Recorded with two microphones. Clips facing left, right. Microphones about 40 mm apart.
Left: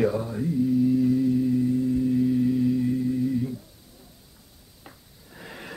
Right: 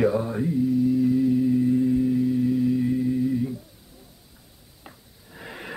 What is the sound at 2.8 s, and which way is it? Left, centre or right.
Music, centre.